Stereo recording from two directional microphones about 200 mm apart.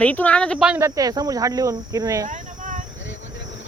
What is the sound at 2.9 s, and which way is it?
Cricket, 70° left (ahead or behind).